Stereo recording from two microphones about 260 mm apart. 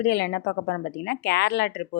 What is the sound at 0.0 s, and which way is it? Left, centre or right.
Speech, left.